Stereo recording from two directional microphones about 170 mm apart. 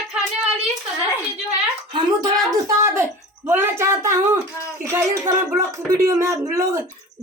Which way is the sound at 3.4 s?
15° right (ahead or behind).